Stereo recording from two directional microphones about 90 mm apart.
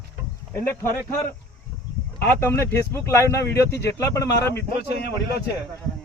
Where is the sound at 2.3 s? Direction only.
30° left (ahead or behind).